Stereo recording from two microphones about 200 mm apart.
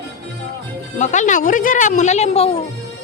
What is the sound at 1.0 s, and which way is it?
A woman's voice, 40° left (ahead or behind).